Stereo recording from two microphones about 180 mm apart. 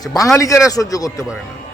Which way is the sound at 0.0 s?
20° left (ahead or behind).